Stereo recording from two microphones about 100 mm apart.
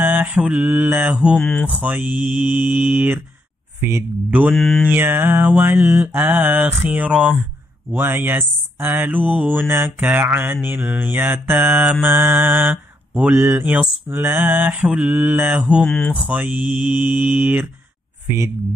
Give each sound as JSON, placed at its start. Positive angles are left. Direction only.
{"t": 0.0, "sound": "mantra", "side_deg": -15}
{"t": 1.1, "sound": "mantra", "side_deg": -5}
{"t": 1.4, "sound": "speech", "side_deg": 15}
{"t": 1.7, "sound": "mantra", "side_deg": -15}
{"t": 4.3, "sound": "mantra", "side_deg": -15}
{"t": 4.6, "sound": "mantra", "side_deg": 5}
{"t": 4.9, "sound": "speech", "side_deg": -20}
{"t": 7.1, "sound": "mantra", "side_deg": -5}
{"t": 7.9, "sound": "speech", "side_deg": -20}
{"t": 14.0, "sound": "mantra", "side_deg": -20}
{"t": 15.8, "sound": "speech", "side_deg": 10}
{"t": 16.3, "sound": "mantra", "side_deg": -15}